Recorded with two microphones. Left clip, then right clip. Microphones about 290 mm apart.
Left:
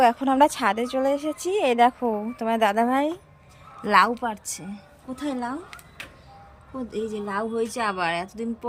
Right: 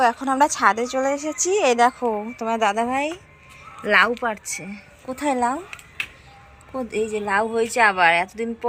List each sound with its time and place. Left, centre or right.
0.0 s speech: centre
1.9 s a woman's voice: centre
4.7 s a woman's voice: centre
7.1 s a woman's voice: right
7.7 s a woman's voice: centre